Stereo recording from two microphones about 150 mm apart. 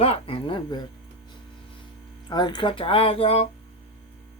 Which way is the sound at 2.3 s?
30° left (ahead or behind).